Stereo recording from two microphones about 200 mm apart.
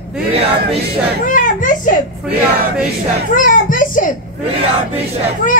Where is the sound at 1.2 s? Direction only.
40° left (ahead or behind).